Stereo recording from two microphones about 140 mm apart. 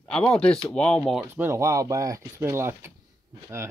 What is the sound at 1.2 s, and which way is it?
Speech, 15° right (ahead or behind).